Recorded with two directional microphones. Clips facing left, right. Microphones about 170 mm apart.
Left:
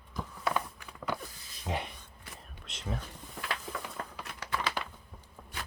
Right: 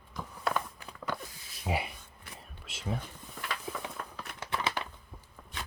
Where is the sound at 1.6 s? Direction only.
10° right (ahead or behind).